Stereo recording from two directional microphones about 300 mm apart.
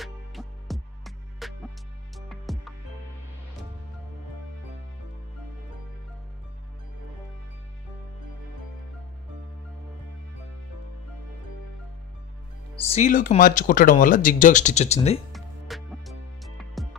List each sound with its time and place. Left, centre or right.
0.0 s music: centre
12.8 s speech: left
15.3 s music: centre